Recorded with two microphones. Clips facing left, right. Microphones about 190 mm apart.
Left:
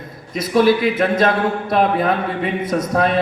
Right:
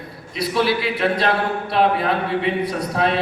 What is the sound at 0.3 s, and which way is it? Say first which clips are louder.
A man's voice: left 6 dB; 45° left (ahead or behind).